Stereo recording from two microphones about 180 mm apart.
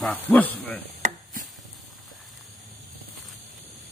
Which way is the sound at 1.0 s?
40° right (ahead or behind).